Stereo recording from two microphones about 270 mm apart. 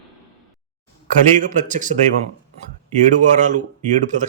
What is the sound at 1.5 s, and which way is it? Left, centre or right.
Speech, right.